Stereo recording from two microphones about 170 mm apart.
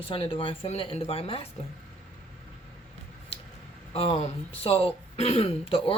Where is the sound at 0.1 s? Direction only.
35° left (ahead or behind).